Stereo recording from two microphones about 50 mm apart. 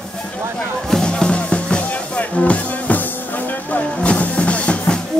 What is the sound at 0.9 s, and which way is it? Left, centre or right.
Music, centre.